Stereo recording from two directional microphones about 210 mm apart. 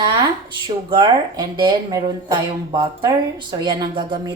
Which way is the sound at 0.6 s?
20° right (ahead or behind).